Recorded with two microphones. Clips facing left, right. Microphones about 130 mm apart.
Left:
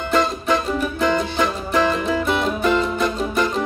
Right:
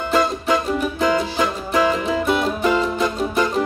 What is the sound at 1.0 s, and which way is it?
Music, 5° right (ahead or behind).